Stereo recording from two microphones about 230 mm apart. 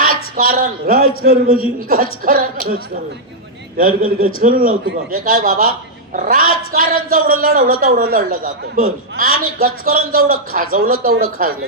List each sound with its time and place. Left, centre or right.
0.3 s speech: right
3.8 s speech: right